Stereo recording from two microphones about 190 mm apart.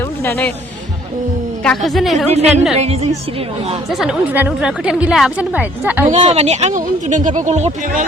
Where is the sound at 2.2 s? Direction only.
35° right (ahead or behind).